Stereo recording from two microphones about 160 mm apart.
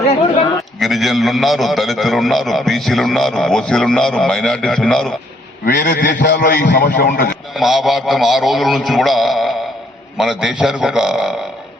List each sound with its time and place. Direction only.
0.8 s a man's voice: centre (ahead or behind)
5.6 s a man's voice: 60° left (ahead or behind)
7.5 s a man's voice: centre (ahead or behind)